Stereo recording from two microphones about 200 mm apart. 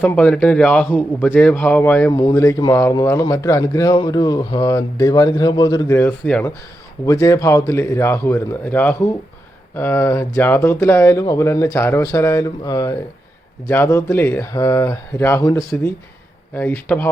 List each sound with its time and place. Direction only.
0.0 s speech: 5° left (ahead or behind)